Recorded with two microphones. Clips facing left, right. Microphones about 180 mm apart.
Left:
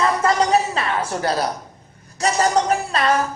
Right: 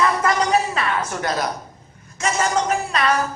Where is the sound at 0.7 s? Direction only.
30° left (ahead or behind).